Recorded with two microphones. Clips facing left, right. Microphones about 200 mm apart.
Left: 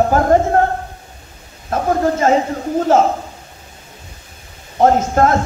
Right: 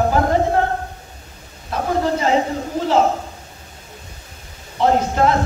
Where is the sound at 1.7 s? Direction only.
45° left (ahead or behind).